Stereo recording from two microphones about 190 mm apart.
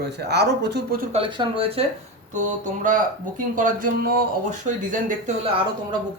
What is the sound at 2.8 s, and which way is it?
A man's voice, 45° right (ahead or behind).